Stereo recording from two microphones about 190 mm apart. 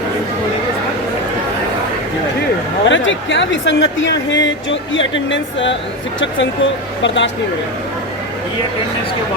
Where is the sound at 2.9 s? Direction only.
80° left.